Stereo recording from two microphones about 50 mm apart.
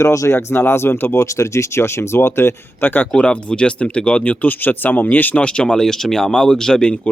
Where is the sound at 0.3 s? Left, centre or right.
Left.